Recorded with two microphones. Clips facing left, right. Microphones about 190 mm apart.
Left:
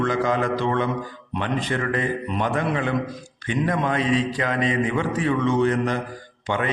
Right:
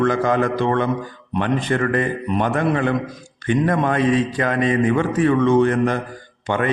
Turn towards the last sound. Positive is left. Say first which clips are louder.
# right 4 dB
turn(degrees=-50)  # may be behind; listen again after turning